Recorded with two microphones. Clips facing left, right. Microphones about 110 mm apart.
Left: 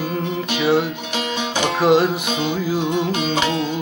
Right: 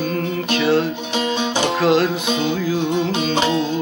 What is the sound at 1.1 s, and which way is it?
Music, 25° right (ahead or behind).